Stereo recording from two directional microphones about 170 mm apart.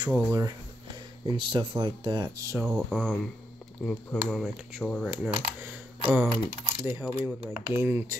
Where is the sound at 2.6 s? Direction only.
5° right (ahead or behind).